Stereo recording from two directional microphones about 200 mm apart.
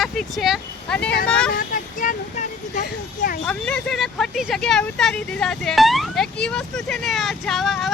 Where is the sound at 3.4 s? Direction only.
5° left (ahead or behind).